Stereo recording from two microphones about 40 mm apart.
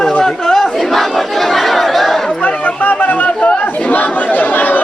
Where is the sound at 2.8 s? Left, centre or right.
Left.